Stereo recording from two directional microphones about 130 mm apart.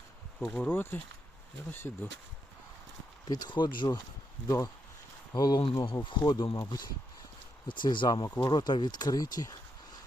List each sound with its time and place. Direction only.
0.4 s speech: 15° left (ahead or behind)
3.2 s speech: 30° left (ahead or behind)
7.7 s speech: 40° left (ahead or behind)